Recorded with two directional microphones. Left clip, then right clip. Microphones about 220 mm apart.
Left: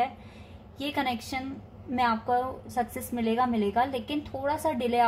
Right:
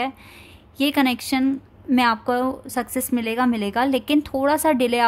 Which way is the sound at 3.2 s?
45° right (ahead or behind).